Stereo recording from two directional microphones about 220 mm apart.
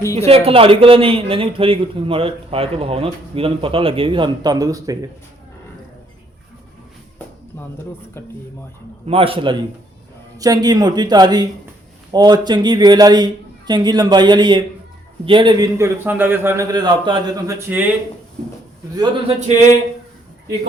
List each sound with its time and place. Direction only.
0.0 s speech: 15° left (ahead or behind)
0.3 s a man's voice: 25° right (ahead or behind)
9.0 s a man's voice: 25° right (ahead or behind)
18.9 s a man's voice: 25° right (ahead or behind)